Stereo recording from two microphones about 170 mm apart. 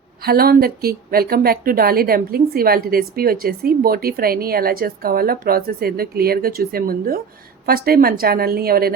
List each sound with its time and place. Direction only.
0.2 s speech: 65° right (ahead or behind)